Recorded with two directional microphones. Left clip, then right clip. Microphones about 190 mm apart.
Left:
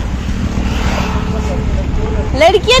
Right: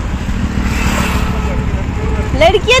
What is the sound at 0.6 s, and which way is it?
Vehicle, 60° right (ahead or behind).